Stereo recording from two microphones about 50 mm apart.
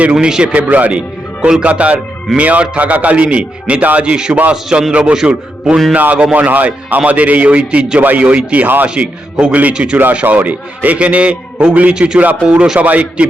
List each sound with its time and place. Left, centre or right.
0.0 s a man's voice: right
0.5 s a man's voice: right; by 5.8 s centre
5.9 s a man's voice: right
8.6 s a man's voice: right
11.9 s a man's voice: centre
12.8 s a man's voice: right